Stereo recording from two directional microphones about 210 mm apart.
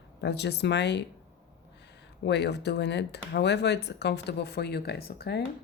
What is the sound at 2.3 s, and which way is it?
Speech, 55° left (ahead or behind).